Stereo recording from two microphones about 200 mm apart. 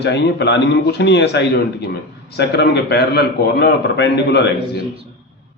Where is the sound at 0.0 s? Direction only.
60° left (ahead or behind).